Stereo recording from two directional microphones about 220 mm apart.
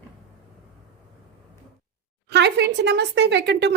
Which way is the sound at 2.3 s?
50° right (ahead or behind).